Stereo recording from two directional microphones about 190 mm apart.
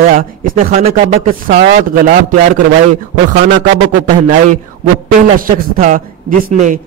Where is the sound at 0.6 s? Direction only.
35° right (ahead or behind).